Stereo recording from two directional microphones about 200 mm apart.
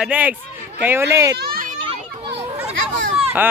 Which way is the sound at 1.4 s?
45° right (ahead or behind).